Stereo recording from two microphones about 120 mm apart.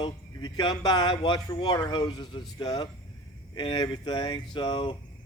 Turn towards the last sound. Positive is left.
turn(degrees=45)  # may be behind; listen again after turning